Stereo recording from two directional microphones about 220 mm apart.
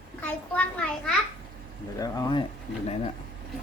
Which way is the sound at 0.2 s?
5° left (ahead or behind).